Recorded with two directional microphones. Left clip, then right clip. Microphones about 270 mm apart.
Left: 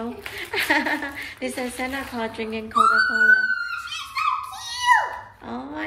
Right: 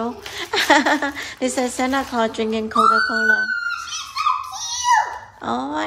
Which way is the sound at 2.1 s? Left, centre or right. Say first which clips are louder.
Right 8 dB; centre.